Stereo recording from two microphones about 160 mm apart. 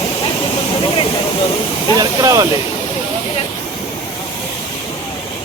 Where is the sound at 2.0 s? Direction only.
20° right (ahead or behind).